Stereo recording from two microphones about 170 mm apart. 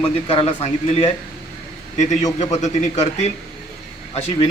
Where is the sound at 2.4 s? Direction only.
40° left (ahead or behind).